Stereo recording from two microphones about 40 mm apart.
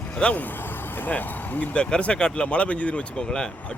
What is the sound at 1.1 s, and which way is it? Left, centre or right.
Speech, left.